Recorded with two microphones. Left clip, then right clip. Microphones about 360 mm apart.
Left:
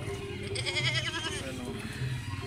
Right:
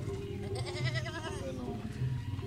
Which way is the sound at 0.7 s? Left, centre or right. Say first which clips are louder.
Left 11 dB; right.